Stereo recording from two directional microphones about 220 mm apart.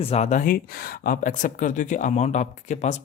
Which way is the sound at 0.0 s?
30° left (ahead or behind).